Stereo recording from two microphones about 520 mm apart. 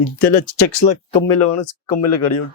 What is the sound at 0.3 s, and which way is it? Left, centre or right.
Speech, left.